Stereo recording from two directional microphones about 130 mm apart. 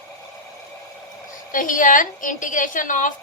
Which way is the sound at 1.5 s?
90° left.